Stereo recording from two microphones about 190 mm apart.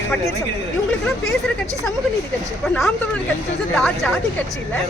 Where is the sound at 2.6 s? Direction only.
5° left (ahead or behind).